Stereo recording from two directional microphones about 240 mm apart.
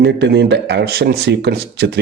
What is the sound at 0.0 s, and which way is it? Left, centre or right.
Speech, right.